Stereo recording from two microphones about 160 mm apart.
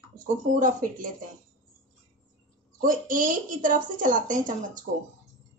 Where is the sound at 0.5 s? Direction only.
55° right (ahead or behind).